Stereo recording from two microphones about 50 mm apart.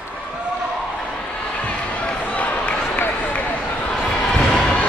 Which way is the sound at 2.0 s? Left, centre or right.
Left.